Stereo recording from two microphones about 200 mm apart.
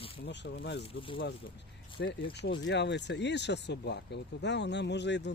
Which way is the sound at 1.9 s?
60° left (ahead or behind).